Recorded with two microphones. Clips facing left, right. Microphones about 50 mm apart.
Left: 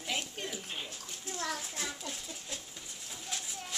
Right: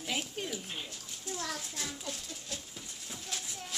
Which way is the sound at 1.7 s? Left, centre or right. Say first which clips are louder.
Left 1 dB; left.